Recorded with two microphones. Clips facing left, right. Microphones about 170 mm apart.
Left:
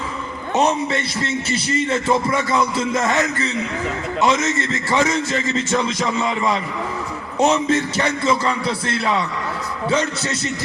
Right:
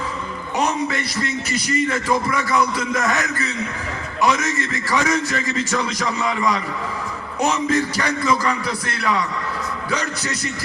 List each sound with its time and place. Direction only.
0.5 s a man's voice: 30° left (ahead or behind)